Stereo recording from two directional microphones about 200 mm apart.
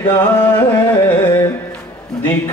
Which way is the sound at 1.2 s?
20° left (ahead or behind).